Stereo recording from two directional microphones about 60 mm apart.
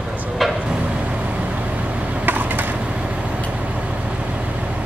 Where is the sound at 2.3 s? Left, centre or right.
Right.